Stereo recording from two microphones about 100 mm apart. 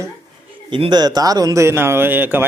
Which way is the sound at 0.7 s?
50° right (ahead or behind).